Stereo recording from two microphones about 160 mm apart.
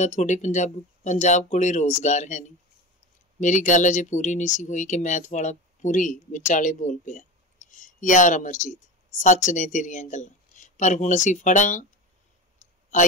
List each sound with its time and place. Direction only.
0.0 s speech: 50° left (ahead or behind)
12.6 s clicking: 50° left (ahead or behind)